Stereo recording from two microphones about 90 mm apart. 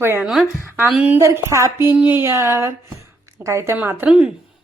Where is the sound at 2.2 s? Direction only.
30° right (ahead or behind).